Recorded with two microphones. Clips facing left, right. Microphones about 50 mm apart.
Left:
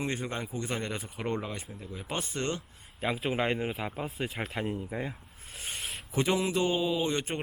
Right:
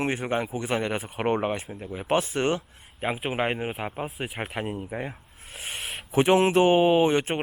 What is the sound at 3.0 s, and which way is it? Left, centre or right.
Speech, right.